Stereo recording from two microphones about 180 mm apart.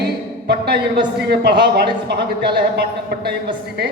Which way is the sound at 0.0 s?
65° right (ahead or behind).